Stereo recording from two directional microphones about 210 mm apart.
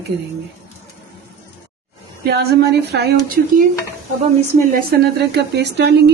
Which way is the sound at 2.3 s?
50° right (ahead or behind).